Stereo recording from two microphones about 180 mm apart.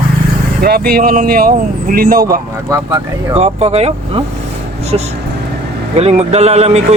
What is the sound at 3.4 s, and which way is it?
Speech, 35° right (ahead or behind).